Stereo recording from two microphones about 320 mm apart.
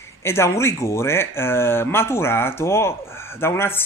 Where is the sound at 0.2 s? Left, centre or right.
Centre.